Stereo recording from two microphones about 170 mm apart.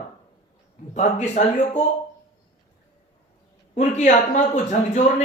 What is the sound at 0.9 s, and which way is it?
Speech, 40° left (ahead or behind).